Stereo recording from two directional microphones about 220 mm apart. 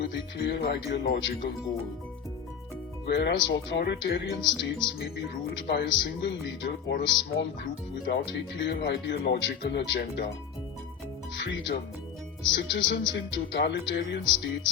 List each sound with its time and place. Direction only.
0.0 s speech: 50° left (ahead or behind)
3.1 s speech: 50° left (ahead or behind)
11.3 s speech: 55° left (ahead or behind)